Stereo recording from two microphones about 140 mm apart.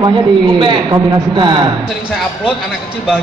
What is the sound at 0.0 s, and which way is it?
A man's voice, 35° right (ahead or behind).